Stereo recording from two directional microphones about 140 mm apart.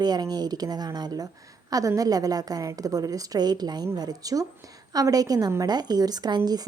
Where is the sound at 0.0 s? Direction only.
30° right (ahead or behind).